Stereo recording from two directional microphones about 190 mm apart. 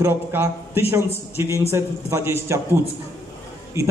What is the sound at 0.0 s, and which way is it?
A man's voice, 10° right (ahead or behind).